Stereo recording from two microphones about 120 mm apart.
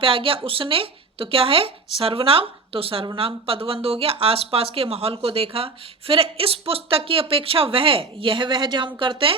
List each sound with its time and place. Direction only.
0.0 s speech: 50° right (ahead or behind)